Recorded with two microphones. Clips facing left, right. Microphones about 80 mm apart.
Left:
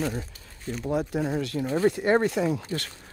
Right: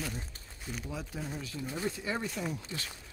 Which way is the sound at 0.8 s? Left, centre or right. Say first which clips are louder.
Left 15 dB; left.